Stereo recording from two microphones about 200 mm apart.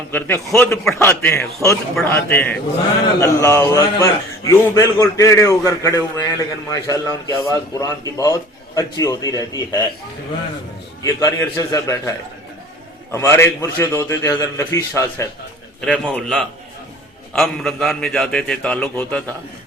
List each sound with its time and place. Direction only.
0.1 s a man's voice: 10° left (ahead or behind)
11.0 s a man's voice: 15° left (ahead or behind)
13.1 s a man's voice: 10° left (ahead or behind)
15.8 s a man's voice: 5° left (ahead or behind)